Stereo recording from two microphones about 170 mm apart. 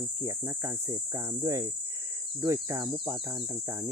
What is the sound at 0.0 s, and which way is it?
Speech, 20° right (ahead or behind).